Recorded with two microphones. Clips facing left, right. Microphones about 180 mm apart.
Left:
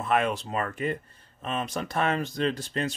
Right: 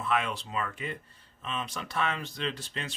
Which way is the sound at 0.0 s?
45° left (ahead or behind).